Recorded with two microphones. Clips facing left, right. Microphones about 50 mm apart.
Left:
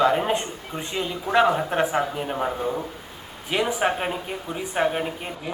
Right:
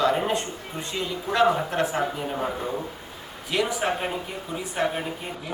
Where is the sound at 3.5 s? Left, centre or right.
Left.